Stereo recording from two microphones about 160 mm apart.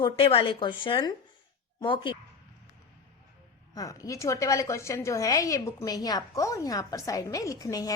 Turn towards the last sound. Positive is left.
turn(degrees=20)  # may be behind; listen again after turning